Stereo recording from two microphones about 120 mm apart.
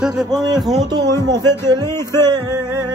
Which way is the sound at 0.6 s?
5° right (ahead or behind).